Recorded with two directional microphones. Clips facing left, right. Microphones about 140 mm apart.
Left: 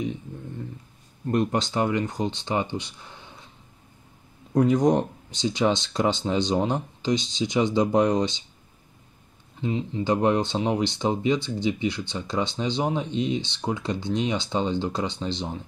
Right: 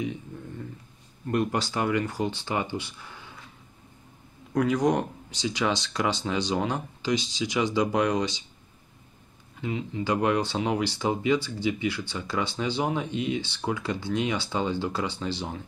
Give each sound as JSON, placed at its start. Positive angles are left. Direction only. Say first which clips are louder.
{"t": 1.2, "sound": "speech", "louder": "left 2 dB", "side_deg": 25}
{"t": 4.6, "sound": "speech", "louder": "left 4 dB", "side_deg": 25}
{"t": 9.6, "sound": "speech", "louder": "left 3 dB", "side_deg": 25}